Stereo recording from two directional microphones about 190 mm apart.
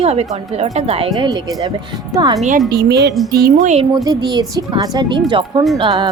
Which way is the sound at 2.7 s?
60° right (ahead or behind).